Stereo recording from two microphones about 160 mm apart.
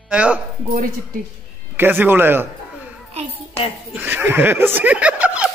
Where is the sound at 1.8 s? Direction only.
10° right (ahead or behind).